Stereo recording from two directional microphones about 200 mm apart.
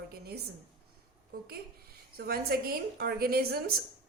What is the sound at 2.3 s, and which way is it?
A woman's voice, 50° right (ahead or behind).